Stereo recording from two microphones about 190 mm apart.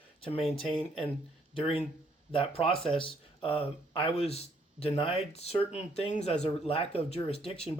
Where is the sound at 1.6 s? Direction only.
30° left (ahead or behind).